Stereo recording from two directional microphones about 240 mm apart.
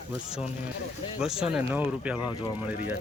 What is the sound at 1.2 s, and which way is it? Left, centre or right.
Speech, centre.